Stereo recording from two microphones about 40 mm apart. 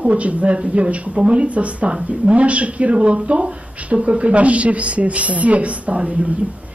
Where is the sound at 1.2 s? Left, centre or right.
Right.